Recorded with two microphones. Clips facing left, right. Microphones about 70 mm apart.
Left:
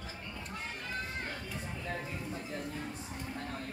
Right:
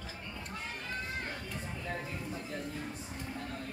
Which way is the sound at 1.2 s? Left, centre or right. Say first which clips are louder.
Even; centre.